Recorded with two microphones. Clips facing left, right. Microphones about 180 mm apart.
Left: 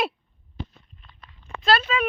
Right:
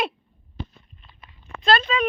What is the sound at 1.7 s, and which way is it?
Speech, 5° left (ahead or behind).